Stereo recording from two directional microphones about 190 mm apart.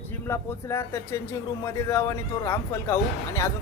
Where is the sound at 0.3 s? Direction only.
15° left (ahead or behind).